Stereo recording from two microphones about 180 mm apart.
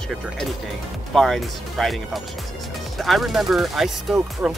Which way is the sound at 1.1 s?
Centre (ahead or behind).